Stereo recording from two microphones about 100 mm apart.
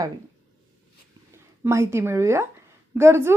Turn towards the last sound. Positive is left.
turn(degrees=-25)  # may be behind; listen again after turning